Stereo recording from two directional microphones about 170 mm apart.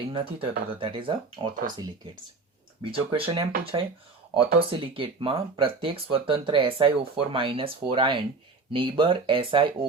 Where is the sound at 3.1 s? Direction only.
30° right (ahead or behind).